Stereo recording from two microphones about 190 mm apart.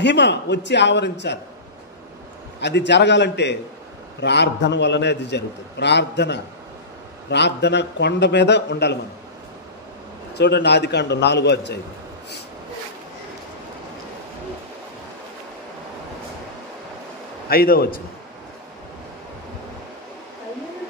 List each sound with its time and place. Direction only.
0.0 s a man's voice: 65° left (ahead or behind)
2.6 s a man's voice: 65° left (ahead or behind)
10.3 s a man's voice: 60° left (ahead or behind)
17.5 s a man's voice: 50° left (ahead or behind)